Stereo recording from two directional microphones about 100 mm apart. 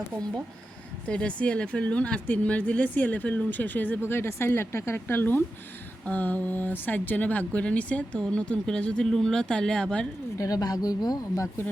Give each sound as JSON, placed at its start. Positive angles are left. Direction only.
{"t": 1.0, "sound": "speech", "side_deg": 10}
{"t": 10.3, "sound": "speech", "side_deg": 35}